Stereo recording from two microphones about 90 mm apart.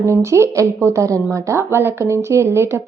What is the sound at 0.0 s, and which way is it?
Speech, 30° right (ahead or behind).